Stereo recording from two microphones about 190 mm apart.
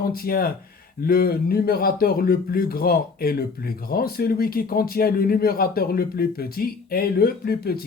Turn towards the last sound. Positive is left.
turn(degrees=55)  # may be behind; listen again after turning